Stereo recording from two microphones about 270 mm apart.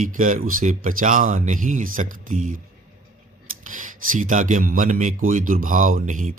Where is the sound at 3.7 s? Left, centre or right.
Right.